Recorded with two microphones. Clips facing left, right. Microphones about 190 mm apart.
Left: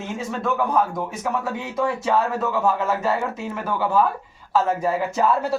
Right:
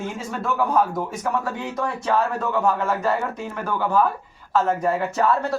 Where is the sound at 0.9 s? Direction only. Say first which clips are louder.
Right 1 dB; 5° left (ahead or behind).